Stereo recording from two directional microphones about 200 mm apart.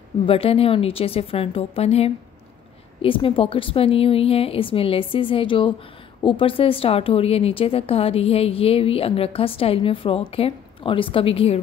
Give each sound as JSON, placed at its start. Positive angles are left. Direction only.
{"t": 0.3, "sound": "speech", "side_deg": 30}